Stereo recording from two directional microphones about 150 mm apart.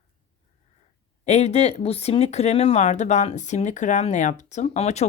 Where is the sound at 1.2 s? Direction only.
45° left (ahead or behind).